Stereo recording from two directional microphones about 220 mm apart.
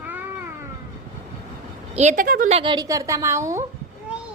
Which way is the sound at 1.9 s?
35° right (ahead or behind).